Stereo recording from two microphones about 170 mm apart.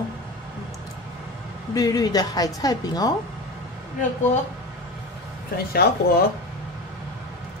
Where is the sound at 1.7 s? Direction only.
20° left (ahead or behind).